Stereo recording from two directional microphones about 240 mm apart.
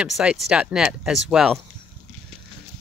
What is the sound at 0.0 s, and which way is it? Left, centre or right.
Speech, centre.